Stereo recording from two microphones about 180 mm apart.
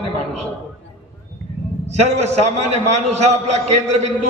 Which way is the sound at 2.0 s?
40° right (ahead or behind).